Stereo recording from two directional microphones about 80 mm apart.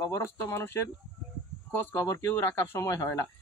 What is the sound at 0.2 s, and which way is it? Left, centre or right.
Speech, left.